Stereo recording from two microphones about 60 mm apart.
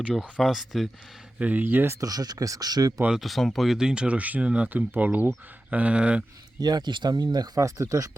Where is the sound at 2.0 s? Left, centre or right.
Right.